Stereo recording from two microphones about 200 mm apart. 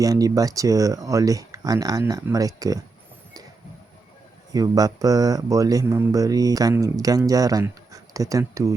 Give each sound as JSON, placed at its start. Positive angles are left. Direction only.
{"t": 0.0, "sound": "speech", "side_deg": -15}
{"t": 4.5, "sound": "speech", "side_deg": -20}